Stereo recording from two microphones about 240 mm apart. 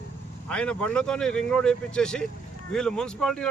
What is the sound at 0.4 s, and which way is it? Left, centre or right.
Speech, centre.